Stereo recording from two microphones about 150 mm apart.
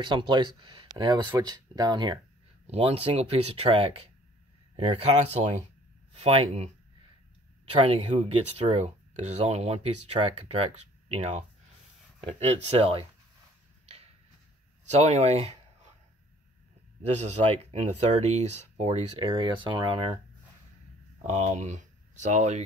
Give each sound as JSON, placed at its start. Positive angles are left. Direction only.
{"t": 0.0, "sound": "speech", "side_deg": -30}
{"t": 2.6, "sound": "speech", "side_deg": -40}
{"t": 7.8, "sound": "speech", "side_deg": -40}
{"t": 14.9, "sound": "speech", "side_deg": -50}
{"t": 17.0, "sound": "speech", "side_deg": -50}
{"t": 21.3, "sound": "speech", "side_deg": -50}